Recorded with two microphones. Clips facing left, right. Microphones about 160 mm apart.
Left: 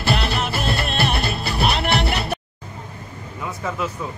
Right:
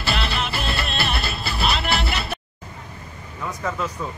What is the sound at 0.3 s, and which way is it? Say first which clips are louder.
Music: left 3 dB; 45° left (ahead or behind).